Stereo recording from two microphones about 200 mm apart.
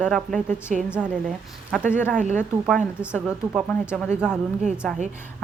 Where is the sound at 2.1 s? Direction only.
40° right (ahead or behind).